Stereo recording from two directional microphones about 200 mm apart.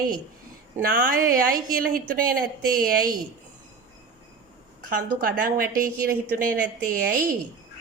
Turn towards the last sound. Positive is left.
turn(degrees=-45)  # may be behind; listen again after turning